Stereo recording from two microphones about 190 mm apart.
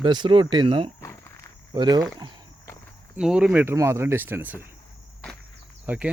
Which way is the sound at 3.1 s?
5° right (ahead or behind).